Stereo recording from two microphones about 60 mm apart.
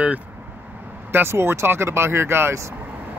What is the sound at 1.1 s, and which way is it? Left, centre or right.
Speech, right.